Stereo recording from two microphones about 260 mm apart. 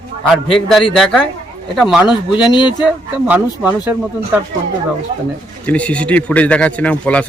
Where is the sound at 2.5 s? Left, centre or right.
Centre.